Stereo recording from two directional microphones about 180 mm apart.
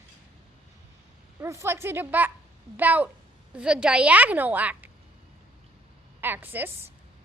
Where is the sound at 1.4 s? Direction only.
15° right (ahead or behind).